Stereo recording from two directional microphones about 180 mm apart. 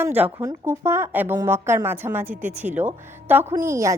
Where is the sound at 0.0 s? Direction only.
10° right (ahead or behind).